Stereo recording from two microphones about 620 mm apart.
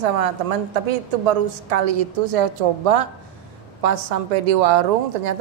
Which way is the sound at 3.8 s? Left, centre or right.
Right.